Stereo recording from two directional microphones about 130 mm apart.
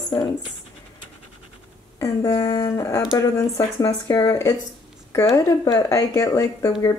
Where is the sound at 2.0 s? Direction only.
20° left (ahead or behind).